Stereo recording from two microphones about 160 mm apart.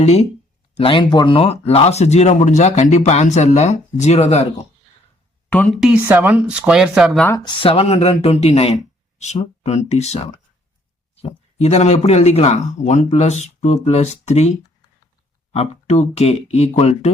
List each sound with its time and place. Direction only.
0.0 s speech: 40° left (ahead or behind)
5.5 s a woman's voice: 10° left (ahead or behind)
5.8 s speech: 10° right (ahead or behind)
7.3 s speech: 25° left (ahead or behind); by 10.2 s 45° left (ahead or behind)
11.2 s speech: 40° left (ahead or behind)
15.5 s speech: 40° left (ahead or behind)